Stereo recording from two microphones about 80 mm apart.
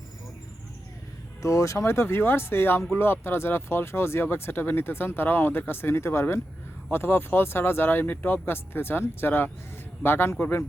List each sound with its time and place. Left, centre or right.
1.4 s speech: left